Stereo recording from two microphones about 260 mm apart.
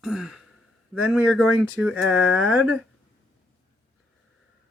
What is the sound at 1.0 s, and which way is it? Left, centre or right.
Speech, centre.